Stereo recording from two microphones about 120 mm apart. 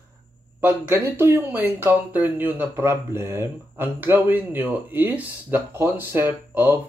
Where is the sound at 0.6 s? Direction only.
15° right (ahead or behind).